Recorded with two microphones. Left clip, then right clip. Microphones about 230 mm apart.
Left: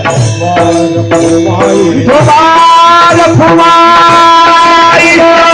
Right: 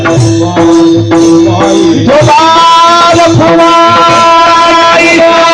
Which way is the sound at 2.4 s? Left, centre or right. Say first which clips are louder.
Even; right.